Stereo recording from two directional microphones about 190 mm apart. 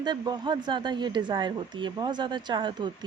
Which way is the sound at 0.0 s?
20° right (ahead or behind).